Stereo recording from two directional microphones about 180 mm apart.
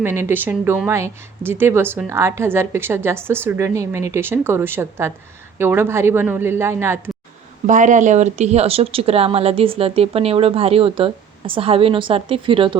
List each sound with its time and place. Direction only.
0.0 s speech: 15° right (ahead or behind)
7.7 s speech: 45° right (ahead or behind); by 12.8 s 30° right (ahead or behind)